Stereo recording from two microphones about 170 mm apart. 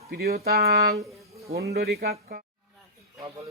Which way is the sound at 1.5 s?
65° right (ahead or behind).